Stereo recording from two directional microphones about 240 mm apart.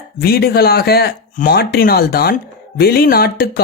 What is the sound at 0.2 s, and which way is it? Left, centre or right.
Speech, left.